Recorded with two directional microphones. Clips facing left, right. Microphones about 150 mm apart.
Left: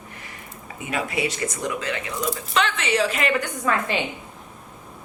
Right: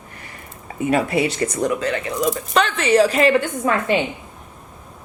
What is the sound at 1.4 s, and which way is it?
Speech, 40° right (ahead or behind).